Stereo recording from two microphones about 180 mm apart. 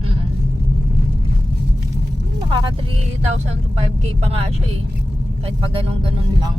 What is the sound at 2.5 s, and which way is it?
Speech, 25° right (ahead or behind).